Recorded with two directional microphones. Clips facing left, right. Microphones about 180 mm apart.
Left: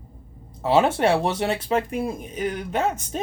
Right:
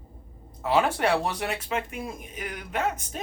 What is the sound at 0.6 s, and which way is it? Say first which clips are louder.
Speech: left 5 dB; 25° left (ahead or behind).